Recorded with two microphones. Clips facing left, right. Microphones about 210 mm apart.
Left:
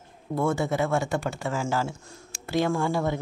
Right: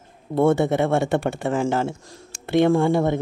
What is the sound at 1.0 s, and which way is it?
Speech, 55° right (ahead or behind).